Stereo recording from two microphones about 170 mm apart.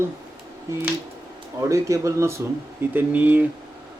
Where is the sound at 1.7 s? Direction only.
20° right (ahead or behind).